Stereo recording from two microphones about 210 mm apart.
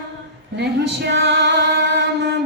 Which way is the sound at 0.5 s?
55° right (ahead or behind).